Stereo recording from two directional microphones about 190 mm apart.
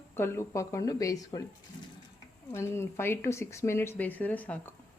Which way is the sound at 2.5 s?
15° left (ahead or behind).